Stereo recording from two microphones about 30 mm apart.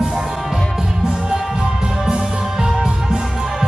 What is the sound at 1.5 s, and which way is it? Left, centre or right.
Music, right.